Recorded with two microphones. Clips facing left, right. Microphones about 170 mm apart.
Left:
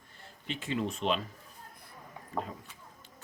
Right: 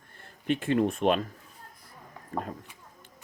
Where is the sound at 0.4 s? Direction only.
55° right (ahead or behind).